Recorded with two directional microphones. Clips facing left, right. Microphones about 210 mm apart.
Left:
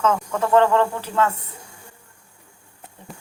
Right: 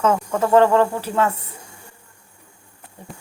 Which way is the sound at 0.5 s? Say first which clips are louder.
Right 2 dB; 10° right (ahead or behind).